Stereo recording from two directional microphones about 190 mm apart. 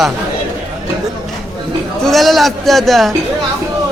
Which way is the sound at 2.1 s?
Centre (ahead or behind).